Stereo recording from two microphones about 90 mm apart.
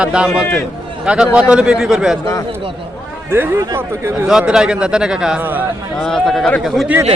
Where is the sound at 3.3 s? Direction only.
30° right (ahead or behind).